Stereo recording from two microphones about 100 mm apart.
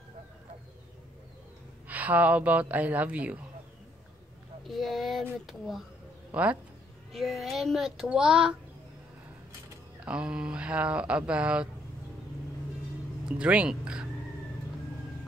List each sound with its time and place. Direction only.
1.9 s speech: 15° right (ahead or behind)
4.6 s a sound: centre (ahead or behind)
5.5 s speech: centre (ahead or behind)
6.3 s speech: 15° right (ahead or behind)
7.1 s speech: centre (ahead or behind)
10.0 s speech: 10° right (ahead or behind)
13.2 s speech: 10° right (ahead or behind)